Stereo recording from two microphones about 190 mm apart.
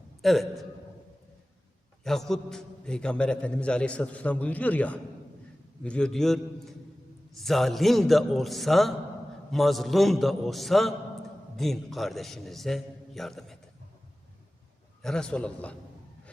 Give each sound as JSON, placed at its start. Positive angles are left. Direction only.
{"t": 0.2, "sound": "a man's voice", "side_deg": 0}
{"t": 2.0, "sound": "a man's voice", "side_deg": 0}
{"t": 15.0, "sound": "a man's voice", "side_deg": 5}